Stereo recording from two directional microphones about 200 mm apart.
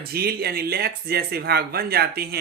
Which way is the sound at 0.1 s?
50° right (ahead or behind).